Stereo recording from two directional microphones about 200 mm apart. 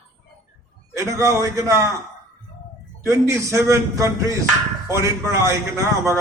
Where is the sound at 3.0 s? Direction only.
15° right (ahead or behind).